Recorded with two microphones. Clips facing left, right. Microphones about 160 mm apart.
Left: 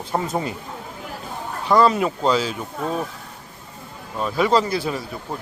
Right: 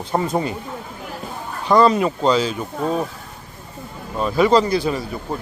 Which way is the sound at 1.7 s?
Centre (ahead or behind).